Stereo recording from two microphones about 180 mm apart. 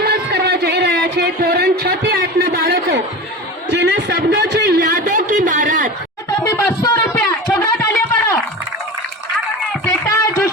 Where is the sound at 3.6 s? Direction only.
75° right (ahead or behind); by 5.9 s 45° right (ahead or behind).